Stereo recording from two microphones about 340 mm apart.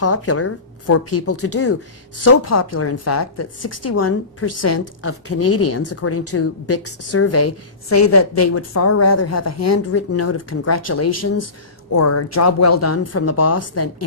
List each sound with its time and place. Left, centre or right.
0.0 s a woman's voice: left